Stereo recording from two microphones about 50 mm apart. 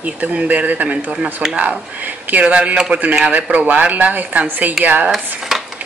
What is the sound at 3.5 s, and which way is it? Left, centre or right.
Speech, right.